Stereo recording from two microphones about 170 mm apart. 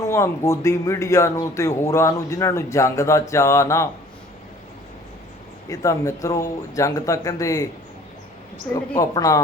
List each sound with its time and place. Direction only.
0.0 s speech: 15° left (ahead or behind)
5.6 s speech: 20° left (ahead or behind)
9.0 s speech: 20° left (ahead or behind)